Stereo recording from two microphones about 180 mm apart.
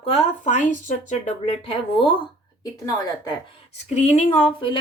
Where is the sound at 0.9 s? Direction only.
40° left (ahead or behind); by 3.3 s 20° left (ahead or behind).